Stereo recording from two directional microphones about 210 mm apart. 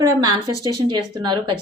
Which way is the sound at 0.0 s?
20° right (ahead or behind).